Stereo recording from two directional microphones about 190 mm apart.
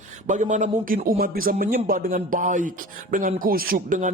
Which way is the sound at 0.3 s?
40° right (ahead or behind).